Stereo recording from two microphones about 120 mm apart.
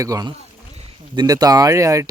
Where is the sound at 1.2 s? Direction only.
30° right (ahead or behind).